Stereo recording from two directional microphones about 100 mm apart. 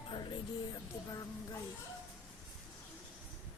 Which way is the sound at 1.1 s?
40° left (ahead or behind).